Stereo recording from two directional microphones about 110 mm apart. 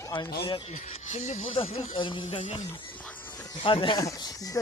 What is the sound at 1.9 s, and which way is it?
Speech, 45° left (ahead or behind).